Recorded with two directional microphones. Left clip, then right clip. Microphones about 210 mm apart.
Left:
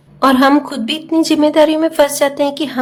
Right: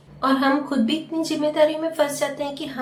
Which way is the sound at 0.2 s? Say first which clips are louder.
Left 10 dB; 55° left (ahead or behind).